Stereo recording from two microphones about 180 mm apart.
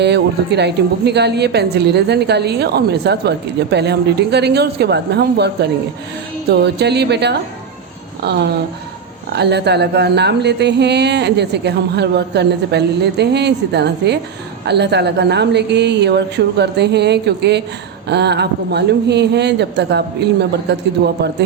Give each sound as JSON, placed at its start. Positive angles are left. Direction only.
{"t": 0.0, "sound": "a woman's voice", "side_deg": -70}
{"t": 6.5, "sound": "a woman's voice", "side_deg": -65}